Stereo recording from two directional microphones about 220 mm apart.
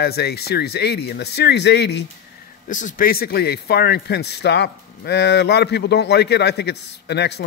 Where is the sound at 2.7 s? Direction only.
35° left (ahead or behind).